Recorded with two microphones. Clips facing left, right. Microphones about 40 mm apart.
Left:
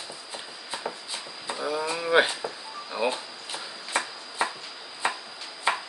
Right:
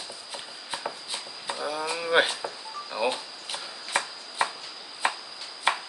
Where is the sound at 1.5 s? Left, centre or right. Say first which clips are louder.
Left 1 dB; centre.